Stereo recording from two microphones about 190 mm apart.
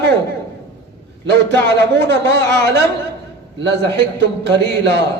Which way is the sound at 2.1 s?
65° right (ahead or behind).